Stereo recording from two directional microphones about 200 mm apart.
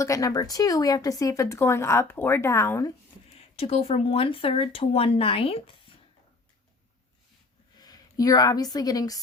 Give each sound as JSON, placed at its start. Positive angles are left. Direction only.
{"t": 0.0, "sound": "speech", "side_deg": 15}
{"t": 3.3, "sound": "speech", "side_deg": 30}
{"t": 7.8, "sound": "speech", "side_deg": 20}